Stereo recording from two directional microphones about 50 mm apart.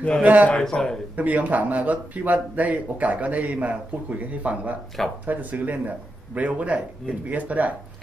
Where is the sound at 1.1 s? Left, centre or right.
Right.